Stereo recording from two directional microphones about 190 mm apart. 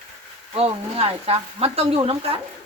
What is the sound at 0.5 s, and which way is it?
Speech, 30° right (ahead or behind).